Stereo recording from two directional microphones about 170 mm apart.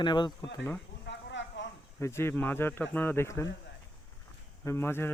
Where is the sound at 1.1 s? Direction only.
90° left.